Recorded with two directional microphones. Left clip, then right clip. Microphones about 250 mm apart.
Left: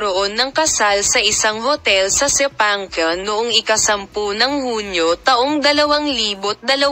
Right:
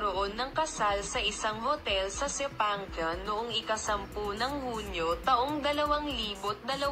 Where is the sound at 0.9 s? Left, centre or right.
Left.